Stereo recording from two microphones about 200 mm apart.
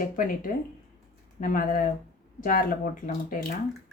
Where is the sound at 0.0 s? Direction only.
45° left (ahead or behind).